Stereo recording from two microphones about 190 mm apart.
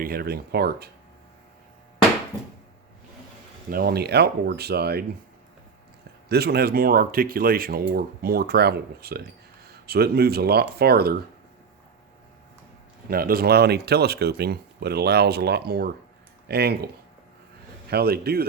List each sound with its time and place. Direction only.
0.0 s speech: 50° right (ahead or behind)
3.7 s speech: 55° right (ahead or behind)
6.2 s speech: 55° right (ahead or behind)
13.1 s speech: 50° right (ahead or behind)
17.9 s speech: 55° right (ahead or behind)